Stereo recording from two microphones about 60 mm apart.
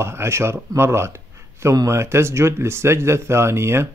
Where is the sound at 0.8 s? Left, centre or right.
Right.